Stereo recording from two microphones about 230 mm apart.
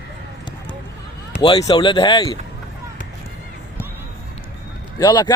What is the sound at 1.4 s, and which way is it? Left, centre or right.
Speech, centre.